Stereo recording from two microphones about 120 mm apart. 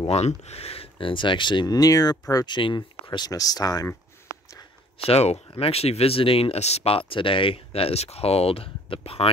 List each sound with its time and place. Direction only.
0.1 s speech: 60° left (ahead or behind); by 3.9 s 30° left (ahead or behind)
4.9 s speech: 55° left (ahead or behind)